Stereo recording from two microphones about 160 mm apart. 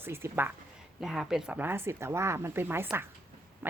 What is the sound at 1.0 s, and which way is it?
Speech, centre (ahead or behind).